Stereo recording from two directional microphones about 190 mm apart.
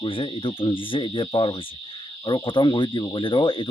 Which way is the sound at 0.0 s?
25° left (ahead or behind).